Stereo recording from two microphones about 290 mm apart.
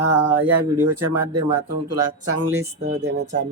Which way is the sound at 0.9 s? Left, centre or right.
Right.